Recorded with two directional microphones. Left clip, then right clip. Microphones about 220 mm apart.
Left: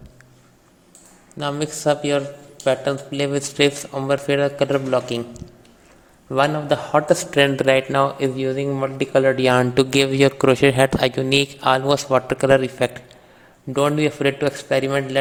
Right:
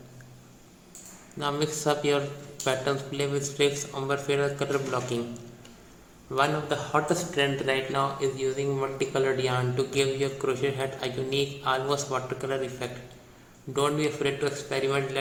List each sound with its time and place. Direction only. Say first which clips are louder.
1.4 s a man's voice: left 4 dB; 30° left (ahead or behind); by 12.9 s 45° left (ahead or behind)
13.7 s a man's voice: left 7 dB; 35° left (ahead or behind)